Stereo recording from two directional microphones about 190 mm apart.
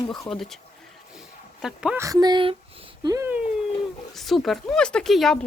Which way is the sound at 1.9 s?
15° right (ahead or behind).